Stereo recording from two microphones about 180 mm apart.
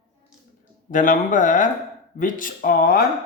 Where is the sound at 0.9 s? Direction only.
45° left (ahead or behind).